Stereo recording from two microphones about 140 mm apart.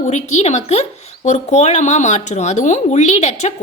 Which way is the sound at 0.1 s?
55° left (ahead or behind).